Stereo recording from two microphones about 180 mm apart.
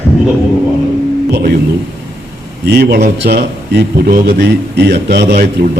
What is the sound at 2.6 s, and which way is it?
A man's voice, 65° right (ahead or behind).